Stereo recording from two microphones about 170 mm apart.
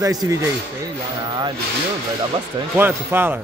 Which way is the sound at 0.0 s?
20° right (ahead or behind).